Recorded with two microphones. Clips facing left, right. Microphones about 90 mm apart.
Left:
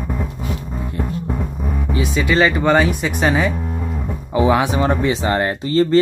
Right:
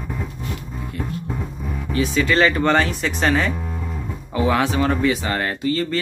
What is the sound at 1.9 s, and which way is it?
Speech, 15° left (ahead or behind).